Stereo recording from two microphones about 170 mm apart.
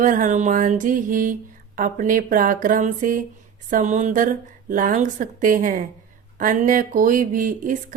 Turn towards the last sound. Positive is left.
turn(degrees=-50)  # may be behind; listen again after turning